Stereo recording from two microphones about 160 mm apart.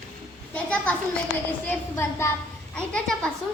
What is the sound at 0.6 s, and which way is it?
A woman's voice, 10° left (ahead or behind).